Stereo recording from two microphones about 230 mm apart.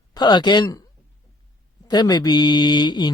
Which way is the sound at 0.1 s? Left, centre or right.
Centre.